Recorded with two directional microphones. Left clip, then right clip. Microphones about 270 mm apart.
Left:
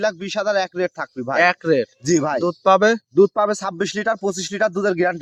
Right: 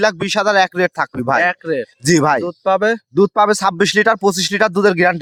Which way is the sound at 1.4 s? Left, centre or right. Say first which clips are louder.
Left 1 dB; centre.